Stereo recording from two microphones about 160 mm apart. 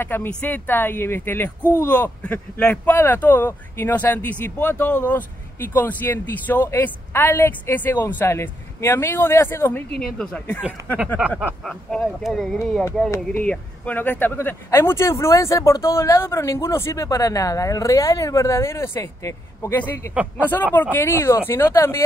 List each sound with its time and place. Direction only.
0.0 s speech: 15° left (ahead or behind)
11.1 s speech: 5° right (ahead or behind); by 22.0 s 15° left (ahead or behind)